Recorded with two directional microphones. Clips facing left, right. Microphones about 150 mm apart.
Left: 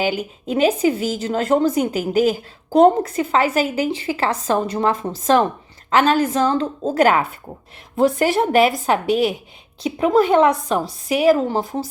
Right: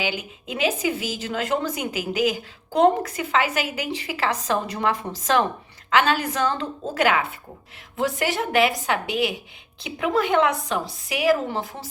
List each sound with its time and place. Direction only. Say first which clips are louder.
0.0 s a woman's voice: left 7 dB; 40° left (ahead or behind)